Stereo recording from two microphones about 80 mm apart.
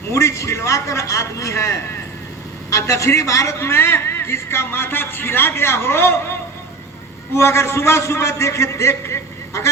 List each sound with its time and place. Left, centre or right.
0.1 s a man's voice: left
7.3 s a man's voice: left